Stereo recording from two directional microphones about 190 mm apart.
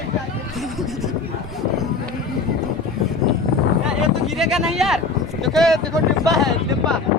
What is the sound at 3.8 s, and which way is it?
Speech, centre (ahead or behind).